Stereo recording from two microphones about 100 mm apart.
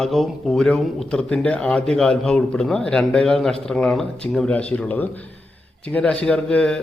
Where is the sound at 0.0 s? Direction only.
Centre (ahead or behind).